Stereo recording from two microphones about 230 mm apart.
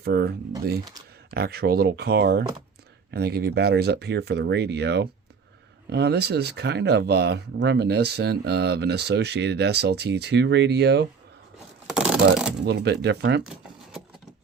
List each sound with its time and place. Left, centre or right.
0.0 s speech: right
11.9 s vehicle: centre
12.6 s speech: right